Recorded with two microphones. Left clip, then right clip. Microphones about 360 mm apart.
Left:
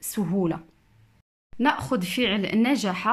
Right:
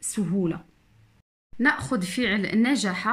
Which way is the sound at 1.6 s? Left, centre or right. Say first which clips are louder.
Even; centre.